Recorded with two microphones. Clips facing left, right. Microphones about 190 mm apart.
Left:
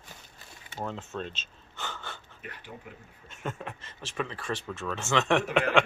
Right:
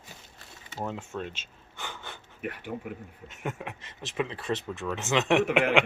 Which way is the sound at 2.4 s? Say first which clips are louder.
Right 12 dB; 55° right (ahead or behind).